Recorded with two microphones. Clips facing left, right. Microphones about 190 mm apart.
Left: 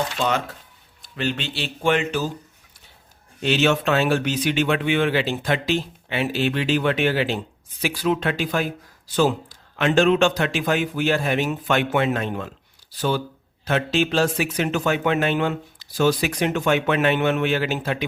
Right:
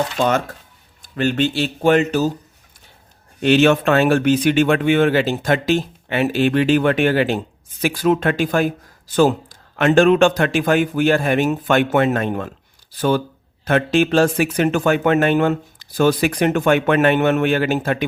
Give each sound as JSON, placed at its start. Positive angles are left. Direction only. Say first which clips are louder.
{"t": 0.2, "sound": "speech", "louder": "right 5 dB", "side_deg": -45}
{"t": 3.4, "sound": "speech", "louder": "right 6 dB", "side_deg": -55}